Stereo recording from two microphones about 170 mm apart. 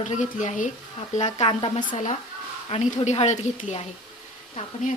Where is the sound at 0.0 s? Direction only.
45° left (ahead or behind).